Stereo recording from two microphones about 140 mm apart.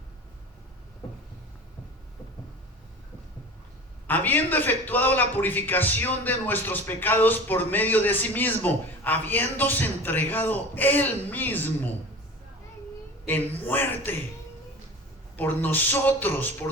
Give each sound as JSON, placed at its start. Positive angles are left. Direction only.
{"t": 4.0, "sound": "a man's voice", "side_deg": 15}
{"t": 13.2, "sound": "a man's voice", "side_deg": 10}
{"t": 15.4, "sound": "a man's voice", "side_deg": 15}